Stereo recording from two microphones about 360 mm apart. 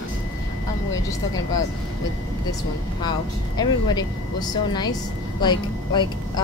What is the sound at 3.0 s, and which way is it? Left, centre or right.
Speech, centre.